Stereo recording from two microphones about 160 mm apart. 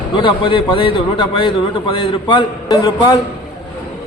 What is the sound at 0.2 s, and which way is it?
A man's voice, 30° left (ahead or behind).